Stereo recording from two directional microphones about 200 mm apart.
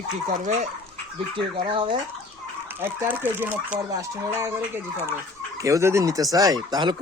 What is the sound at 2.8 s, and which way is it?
Speech, 10° right (ahead or behind).